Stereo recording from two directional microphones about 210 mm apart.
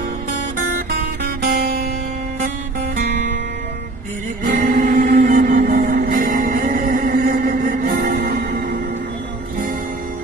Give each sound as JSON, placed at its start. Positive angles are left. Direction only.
{"t": 0.8, "sound": "music", "side_deg": -45}
{"t": 4.5, "sound": "music", "side_deg": -45}